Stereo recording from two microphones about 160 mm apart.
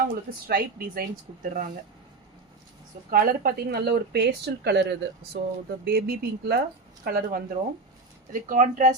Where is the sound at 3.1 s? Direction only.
65° right (ahead or behind); by 5.4 s 90° right.